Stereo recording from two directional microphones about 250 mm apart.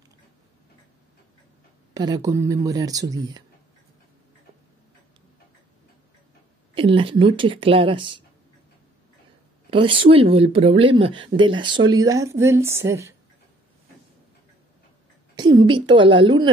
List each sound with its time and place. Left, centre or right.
2.0 s speech: centre
6.7 s speech: right
9.7 s speech: right
15.3 s speech: centre